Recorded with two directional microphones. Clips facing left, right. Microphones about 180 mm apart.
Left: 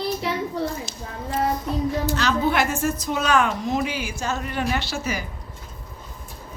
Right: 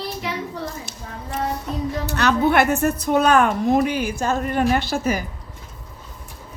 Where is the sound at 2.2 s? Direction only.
60° right (ahead or behind).